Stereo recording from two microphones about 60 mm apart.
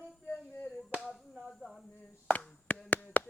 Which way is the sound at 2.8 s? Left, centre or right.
Left.